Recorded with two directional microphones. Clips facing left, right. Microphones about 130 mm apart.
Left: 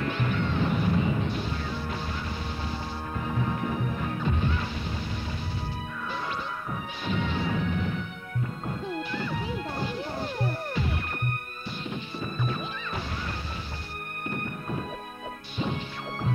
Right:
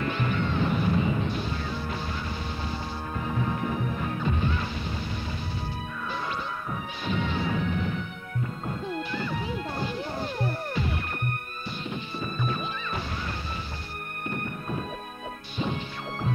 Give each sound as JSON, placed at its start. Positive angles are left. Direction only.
{"t": 0.4, "sound": "a sound", "side_deg": -30}
{"t": 7.1, "sound": "smash", "side_deg": -30}
{"t": 9.1, "sound": "smash", "side_deg": 5}
{"t": 10.2, "sound": "music", "side_deg": 5}